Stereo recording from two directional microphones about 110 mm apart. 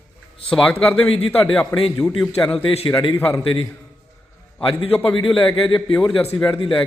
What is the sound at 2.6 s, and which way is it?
Speech, 50° left (ahead or behind).